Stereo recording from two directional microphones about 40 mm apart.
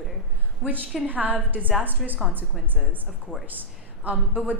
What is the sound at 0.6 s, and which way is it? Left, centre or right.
A woman's voice, right.